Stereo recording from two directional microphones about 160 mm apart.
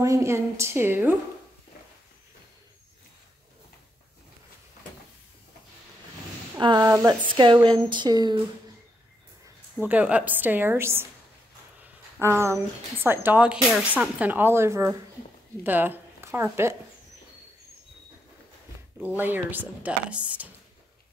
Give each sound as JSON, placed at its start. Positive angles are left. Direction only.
{"t": 0.0, "sound": "speech", "side_deg": -20}
{"t": 6.6, "sound": "speech", "side_deg": -25}
{"t": 7.2, "sound": "a woman's voice", "side_deg": -30}
{"t": 9.8, "sound": "speech", "side_deg": -10}
{"t": 11.8, "sound": "a sound", "side_deg": -15}
{"t": 13.0, "sound": "speech", "side_deg": -10}
{"t": 19.0, "sound": "speech", "side_deg": -10}